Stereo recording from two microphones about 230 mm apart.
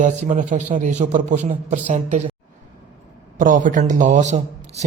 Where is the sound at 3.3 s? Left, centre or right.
Right.